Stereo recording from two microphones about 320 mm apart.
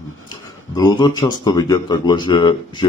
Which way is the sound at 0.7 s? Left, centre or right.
Centre.